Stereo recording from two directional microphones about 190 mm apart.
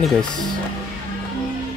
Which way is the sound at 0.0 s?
Centre (ahead or behind).